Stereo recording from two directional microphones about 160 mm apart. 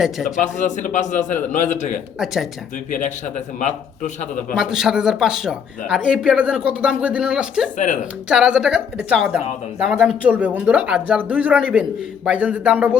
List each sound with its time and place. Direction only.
0.0 s speech: centre (ahead or behind)
0.3 s a man's voice: 50° left (ahead or behind)
2.1 s speech: centre (ahead or behind)
2.9 s a man's voice: 50° left (ahead or behind)
4.5 s speech: centre (ahead or behind)